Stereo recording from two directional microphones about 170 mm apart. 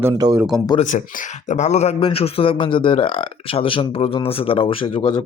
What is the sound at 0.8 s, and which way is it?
Speech, 45° left (ahead or behind).